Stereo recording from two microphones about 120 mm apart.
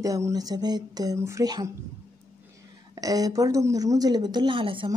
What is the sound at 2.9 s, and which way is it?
A woman's voice, 30° right (ahead or behind).